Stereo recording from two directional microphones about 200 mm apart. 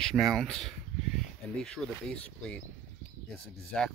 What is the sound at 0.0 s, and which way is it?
Speech, centre (ahead or behind).